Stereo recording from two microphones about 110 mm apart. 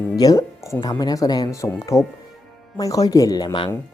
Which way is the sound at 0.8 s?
40° left (ahead or behind).